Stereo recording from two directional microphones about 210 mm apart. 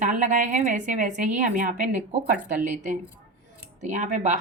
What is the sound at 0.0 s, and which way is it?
A woman's voice, 35° right (ahead or behind).